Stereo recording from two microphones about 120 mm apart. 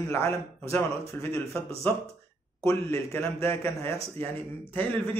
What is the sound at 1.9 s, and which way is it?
A man's voice, 15° left (ahead or behind).